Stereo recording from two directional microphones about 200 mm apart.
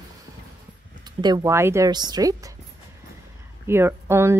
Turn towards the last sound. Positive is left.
turn(degrees=-15)  # may be behind; listen again after turning